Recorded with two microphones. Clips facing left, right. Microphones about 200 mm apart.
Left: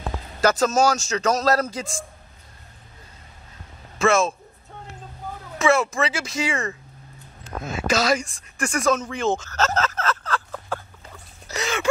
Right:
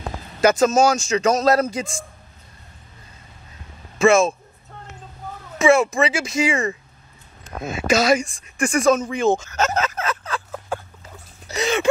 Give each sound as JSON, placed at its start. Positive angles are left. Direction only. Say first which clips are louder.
{"t": 0.4, "sound": "speech", "louder": "right 3 dB", "side_deg": -10}
{"t": 4.0, "sound": "speech", "louder": "right 4 dB", "side_deg": -10}
{"t": 5.6, "sound": "speech", "louder": "right 4 dB", "side_deg": -10}
{"t": 8.8, "sound": "a sound", "louder": "right 4 dB", "side_deg": -10}